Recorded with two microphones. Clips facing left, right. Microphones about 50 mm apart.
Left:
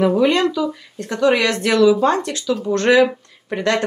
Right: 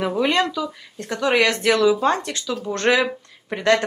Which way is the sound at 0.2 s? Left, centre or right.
Right.